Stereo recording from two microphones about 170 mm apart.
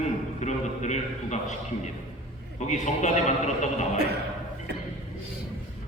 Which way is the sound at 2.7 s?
45° left (ahead or behind).